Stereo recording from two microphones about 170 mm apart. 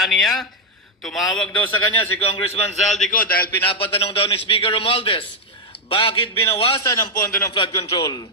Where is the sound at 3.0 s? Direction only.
55° left (ahead or behind).